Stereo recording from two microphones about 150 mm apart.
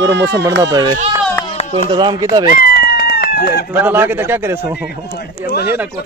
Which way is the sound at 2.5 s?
85° left.